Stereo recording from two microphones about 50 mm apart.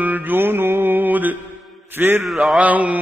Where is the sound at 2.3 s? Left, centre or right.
Centre.